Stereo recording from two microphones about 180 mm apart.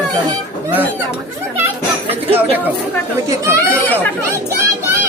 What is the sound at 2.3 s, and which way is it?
Speech, 10° right (ahead or behind).